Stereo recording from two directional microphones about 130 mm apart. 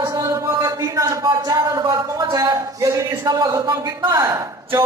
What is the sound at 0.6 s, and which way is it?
A man's voice, 25° right (ahead or behind).